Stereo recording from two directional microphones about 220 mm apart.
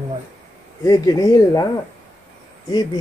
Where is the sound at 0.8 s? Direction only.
15° left (ahead or behind).